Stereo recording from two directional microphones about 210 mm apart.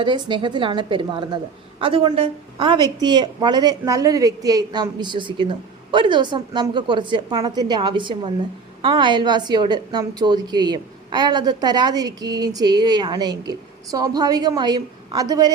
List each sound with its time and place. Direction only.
0.0 s a woman's voice: 20° right (ahead or behind)